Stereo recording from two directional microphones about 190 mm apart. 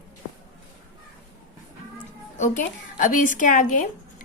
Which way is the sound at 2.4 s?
45° left (ahead or behind).